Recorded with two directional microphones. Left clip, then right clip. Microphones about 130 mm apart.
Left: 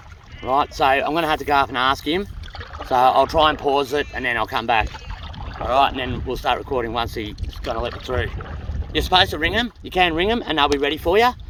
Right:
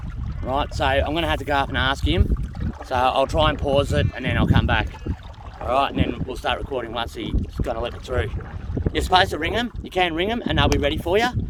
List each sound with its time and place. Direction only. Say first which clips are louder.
0.4 s speech: left 5 dB; 55° right (ahead or behind)
8.9 s speech: left 1 dB; 65° right (ahead or behind)